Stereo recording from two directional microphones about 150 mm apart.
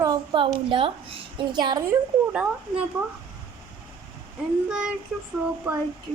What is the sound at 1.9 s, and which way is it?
Speech, 5° right (ahead or behind).